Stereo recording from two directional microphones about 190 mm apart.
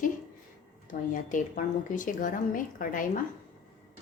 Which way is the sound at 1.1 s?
45° left (ahead or behind).